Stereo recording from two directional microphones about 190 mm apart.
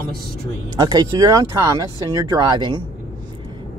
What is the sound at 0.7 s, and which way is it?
Speech, 20° right (ahead or behind).